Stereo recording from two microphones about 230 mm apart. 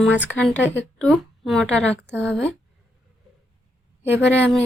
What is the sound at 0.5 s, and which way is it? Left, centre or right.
Speech, left.